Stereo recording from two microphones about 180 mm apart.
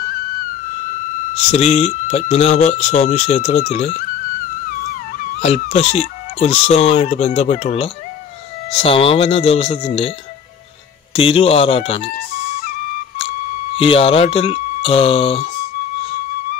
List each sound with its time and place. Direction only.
1.5 s speech: 35° left (ahead or behind)
4.6 s music: 50° left (ahead or behind)
5.4 s speech: 35° left (ahead or behind)
11.1 s speech: 30° left (ahead or behind)
12.4 s flute: 40° left (ahead or behind)
13.7 s speech: 30° left (ahead or behind)